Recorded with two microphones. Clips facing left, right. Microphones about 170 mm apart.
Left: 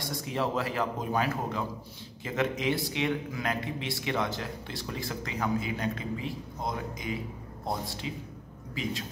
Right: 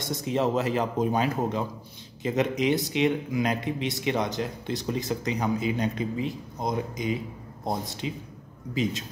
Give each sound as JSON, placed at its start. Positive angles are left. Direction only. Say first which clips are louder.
{"t": 0.0, "sound": "a man's voice", "louder": "right 5 dB", "side_deg": -20}